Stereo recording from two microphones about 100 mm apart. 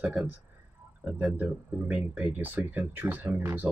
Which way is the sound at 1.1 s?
10° right (ahead or behind).